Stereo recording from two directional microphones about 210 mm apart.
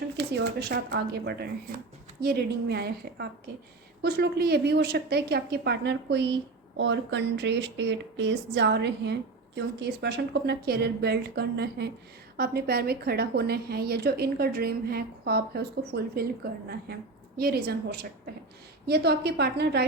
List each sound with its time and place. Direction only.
0.2 s a woman's voice: 55° right (ahead or behind)